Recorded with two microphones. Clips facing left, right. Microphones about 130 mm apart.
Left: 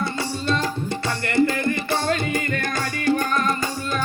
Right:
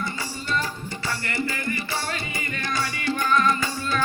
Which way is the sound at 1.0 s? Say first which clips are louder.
Left 8 dB; 60° left (ahead or behind).